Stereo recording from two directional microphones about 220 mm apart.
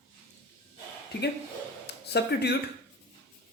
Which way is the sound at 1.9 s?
50° left (ahead or behind).